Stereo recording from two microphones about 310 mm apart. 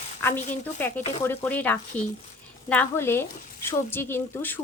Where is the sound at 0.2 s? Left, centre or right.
Centre.